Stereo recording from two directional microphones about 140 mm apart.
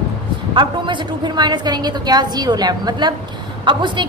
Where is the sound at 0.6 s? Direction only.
35° right (ahead or behind).